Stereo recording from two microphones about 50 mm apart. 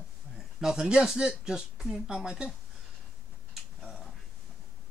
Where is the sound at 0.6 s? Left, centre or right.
Centre.